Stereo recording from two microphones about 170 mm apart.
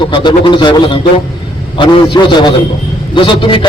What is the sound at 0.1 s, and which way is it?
A man's voice, 30° left (ahead or behind).